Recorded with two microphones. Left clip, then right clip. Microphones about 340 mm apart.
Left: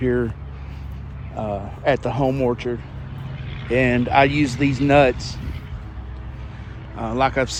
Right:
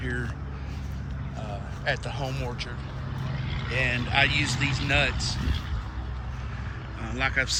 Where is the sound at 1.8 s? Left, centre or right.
Centre.